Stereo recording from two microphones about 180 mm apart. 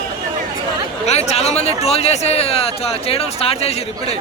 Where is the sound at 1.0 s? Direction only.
35° left (ahead or behind).